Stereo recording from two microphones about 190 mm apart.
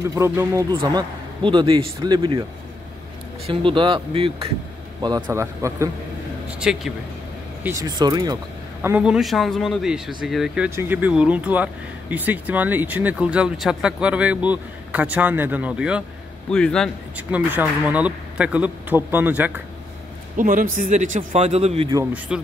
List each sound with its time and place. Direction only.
0.0 s speech: 15° right (ahead or behind)
3.4 s speech: 25° right (ahead or behind)
6.6 s a man's voice: 5° right (ahead or behind)
7.6 s speech: 20° right (ahead or behind)
8.8 s speech: 5° right (ahead or behind)
16.4 s a man's voice: 5° left (ahead or behind)
17.3 s speech: 10° right (ahead or behind)
20.3 s speech: 45° right (ahead or behind)
21.9 s speech: 10° right (ahead or behind)